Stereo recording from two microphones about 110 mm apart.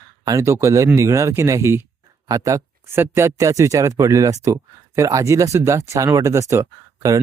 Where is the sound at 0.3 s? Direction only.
25° right (ahead or behind).